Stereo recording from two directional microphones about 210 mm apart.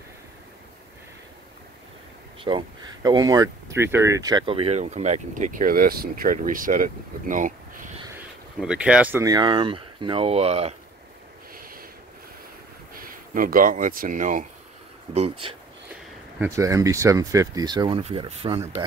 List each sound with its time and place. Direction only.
2.4 s speech: 20° right (ahead or behind); by 7.9 s 40° right (ahead or behind)
8.5 s speech: 5° right (ahead or behind); by 10.7 s 30° right (ahead or behind)
11.5 s a sound: 45° right (ahead or behind)
12.9 s speech: 45° right (ahead or behind)
15.1 s speech: 25° right (ahead or behind)
16.3 s speech: 10° right (ahead or behind)